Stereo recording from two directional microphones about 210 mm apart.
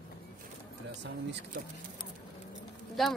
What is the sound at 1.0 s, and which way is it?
Speech, 55° right (ahead or behind).